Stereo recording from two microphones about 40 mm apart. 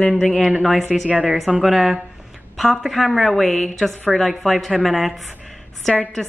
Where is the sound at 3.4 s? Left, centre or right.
Centre.